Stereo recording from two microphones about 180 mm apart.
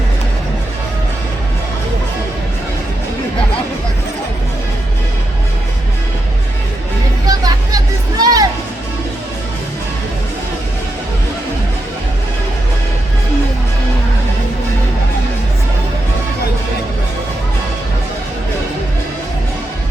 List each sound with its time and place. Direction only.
7.3 s music: 20° right (ahead or behind)